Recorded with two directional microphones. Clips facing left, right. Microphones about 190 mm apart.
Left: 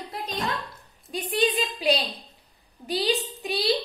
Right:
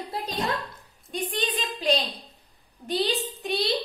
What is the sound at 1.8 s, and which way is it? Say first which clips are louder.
A woman's voice: even; 10° left (ahead or behind).